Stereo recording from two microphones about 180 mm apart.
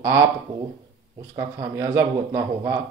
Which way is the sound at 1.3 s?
15° right (ahead or behind).